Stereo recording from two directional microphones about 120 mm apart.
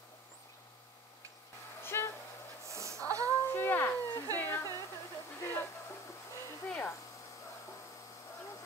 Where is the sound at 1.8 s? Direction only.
20° left (ahead or behind).